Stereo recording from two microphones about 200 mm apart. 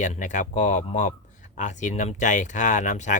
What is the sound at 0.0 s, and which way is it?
Speech, 40° left (ahead or behind).